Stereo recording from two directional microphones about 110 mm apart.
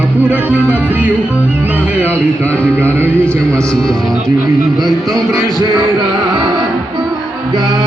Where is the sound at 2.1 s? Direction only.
15° left (ahead or behind).